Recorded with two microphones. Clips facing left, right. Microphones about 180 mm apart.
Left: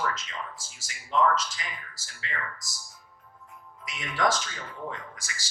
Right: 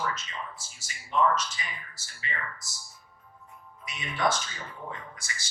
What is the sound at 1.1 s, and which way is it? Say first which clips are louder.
Speech: left 1 dB; 90° left.